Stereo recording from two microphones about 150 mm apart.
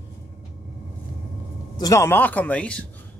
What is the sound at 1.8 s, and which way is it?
Speech, 20° left (ahead or behind).